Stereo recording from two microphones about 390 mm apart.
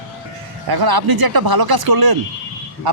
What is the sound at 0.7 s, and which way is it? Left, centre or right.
Speech, right.